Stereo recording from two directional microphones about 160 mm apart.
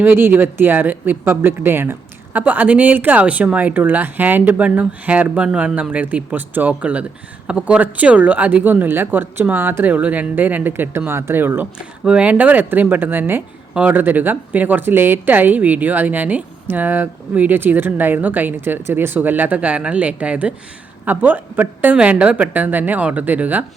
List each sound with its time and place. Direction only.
0.0 s speech: 15° right (ahead or behind)